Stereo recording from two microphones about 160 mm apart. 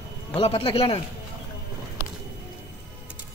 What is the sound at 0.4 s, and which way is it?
Speech, 35° left (ahead or behind).